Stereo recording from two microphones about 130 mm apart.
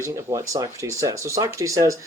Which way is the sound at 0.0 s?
20° right (ahead or behind).